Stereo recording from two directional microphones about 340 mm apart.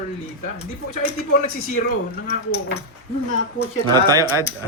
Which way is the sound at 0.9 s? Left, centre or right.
Left.